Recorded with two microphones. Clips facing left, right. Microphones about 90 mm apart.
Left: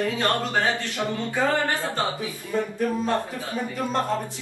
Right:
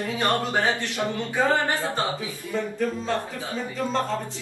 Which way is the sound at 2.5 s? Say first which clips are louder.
Left 1 dB; 15° left (ahead or behind).